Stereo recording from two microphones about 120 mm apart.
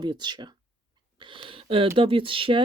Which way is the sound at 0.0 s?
35° right (ahead or behind).